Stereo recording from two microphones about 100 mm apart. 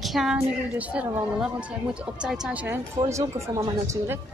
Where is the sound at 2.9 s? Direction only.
30° right (ahead or behind).